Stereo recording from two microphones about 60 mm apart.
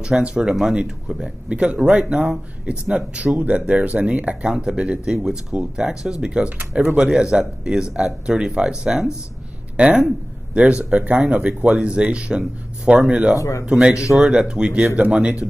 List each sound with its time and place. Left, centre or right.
0.0 s speech: centre
3.3 s speech: right
13.4 s speech: left
13.7 s speech: centre